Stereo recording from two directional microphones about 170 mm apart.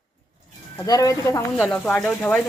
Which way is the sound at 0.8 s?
20° left (ahead or behind).